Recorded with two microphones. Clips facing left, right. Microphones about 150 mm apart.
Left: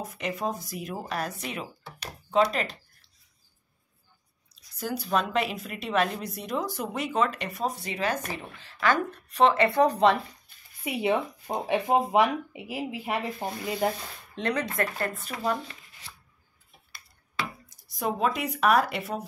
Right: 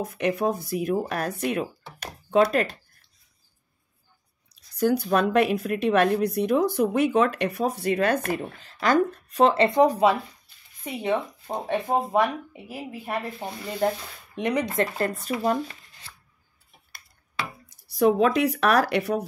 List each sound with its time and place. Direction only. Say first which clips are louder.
0.4 s speech: right 7 dB; 60° right (ahead or behind)
4.7 s speech: right 6 dB; 60° right (ahead or behind); by 9.6 s 45° right (ahead or behind)
9.8 s speech: right 2 dB; 10° right (ahead or behind)
10.8 s speech: even; 10° left (ahead or behind)
14.3 s speech: right 4 dB; 15° right (ahead or behind); by 15.3 s 35° right (ahead or behind)
17.8 s speech: right 8 dB; 70° right (ahead or behind)